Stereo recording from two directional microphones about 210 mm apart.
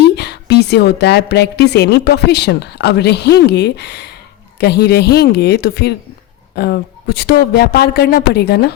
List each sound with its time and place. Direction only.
0.0 s a woman's voice: 50° left (ahead or behind)